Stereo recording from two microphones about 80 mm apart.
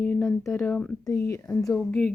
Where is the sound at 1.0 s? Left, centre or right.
Left.